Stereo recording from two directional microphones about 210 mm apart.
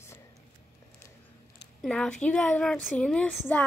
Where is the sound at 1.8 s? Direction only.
5° left (ahead or behind).